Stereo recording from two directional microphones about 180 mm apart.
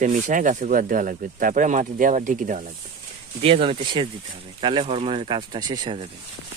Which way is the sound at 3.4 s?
30° right (ahead or behind).